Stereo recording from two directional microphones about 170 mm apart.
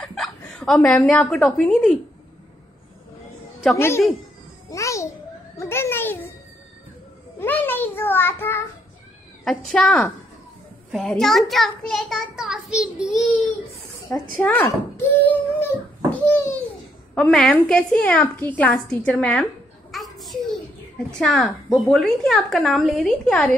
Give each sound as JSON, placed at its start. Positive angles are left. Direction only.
{"t": 0.0, "sound": "a sound", "side_deg": 5}
{"t": 0.8, "sound": "a child's voice", "side_deg": 5}
{"t": 3.7, "sound": "a woman's voice", "side_deg": 15}
{"t": 4.6, "sound": "babbling", "side_deg": 20}
{"t": 5.6, "sound": "a child's voice", "side_deg": 15}
{"t": 7.3, "sound": "a woman's voice", "side_deg": 10}
{"t": 9.4, "sound": "a child's voice", "side_deg": 0}
{"t": 14.1, "sound": "a woman's voice", "side_deg": 15}
{"t": 19.9, "sound": "a sound", "side_deg": 0}
{"t": 21.2, "sound": "a child's voice", "side_deg": 0}